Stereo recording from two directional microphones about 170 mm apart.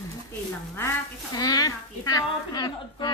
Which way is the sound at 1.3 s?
20° left (ahead or behind).